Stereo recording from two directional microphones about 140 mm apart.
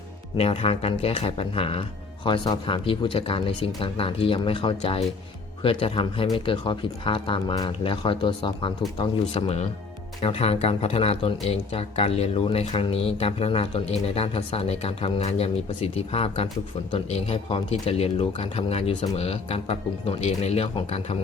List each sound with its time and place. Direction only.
0.3 s speech: 45° left (ahead or behind)
9.3 s speech: 50° left (ahead or behind)